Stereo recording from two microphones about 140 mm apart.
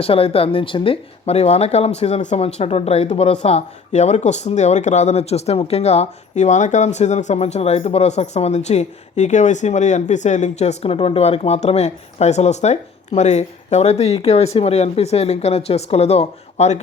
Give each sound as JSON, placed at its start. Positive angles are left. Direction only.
{"t": 0.0, "sound": "speech", "side_deg": 45}